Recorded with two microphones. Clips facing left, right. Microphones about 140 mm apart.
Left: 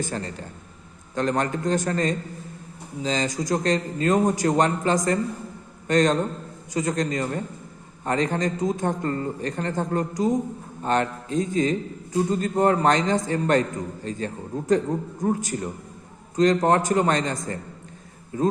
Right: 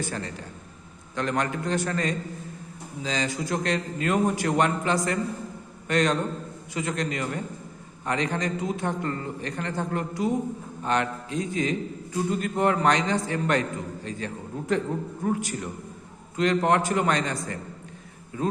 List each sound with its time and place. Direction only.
1.1 s a man's voice: 40° left (ahead or behind)